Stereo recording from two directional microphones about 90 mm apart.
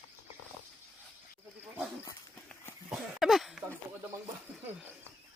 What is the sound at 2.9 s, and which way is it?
Cough, 5° right (ahead or behind).